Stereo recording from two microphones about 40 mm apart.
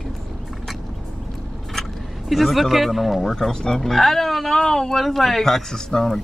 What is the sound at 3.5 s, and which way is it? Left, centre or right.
Speech, centre.